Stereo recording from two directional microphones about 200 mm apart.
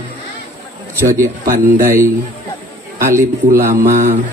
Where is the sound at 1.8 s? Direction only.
15° right (ahead or behind).